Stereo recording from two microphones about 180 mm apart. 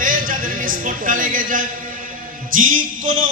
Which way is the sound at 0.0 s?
50° right (ahead or behind).